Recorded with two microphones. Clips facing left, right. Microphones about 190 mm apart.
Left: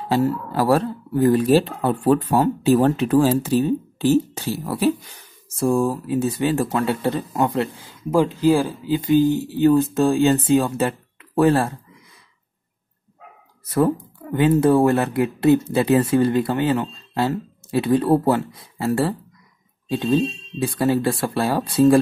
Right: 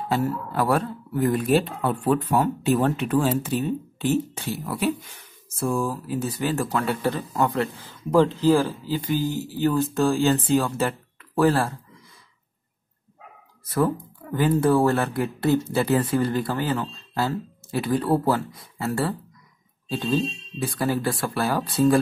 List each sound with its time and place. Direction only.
0.1 s speech: 30° left (ahead or behind)
8.1 s speech: 10° left (ahead or behind)
14.3 s speech: 20° left (ahead or behind)